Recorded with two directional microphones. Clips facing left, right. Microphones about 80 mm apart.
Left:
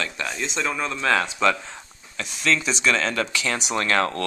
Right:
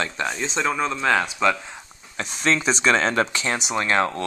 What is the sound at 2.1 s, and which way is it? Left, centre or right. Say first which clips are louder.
Speech: right 1 dB; right.